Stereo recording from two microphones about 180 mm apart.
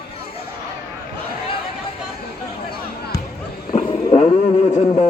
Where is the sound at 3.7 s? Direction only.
35° left (ahead or behind).